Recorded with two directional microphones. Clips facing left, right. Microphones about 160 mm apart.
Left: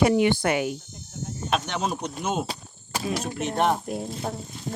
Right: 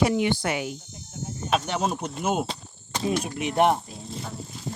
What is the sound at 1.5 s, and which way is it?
Speech, 5° right (ahead or behind).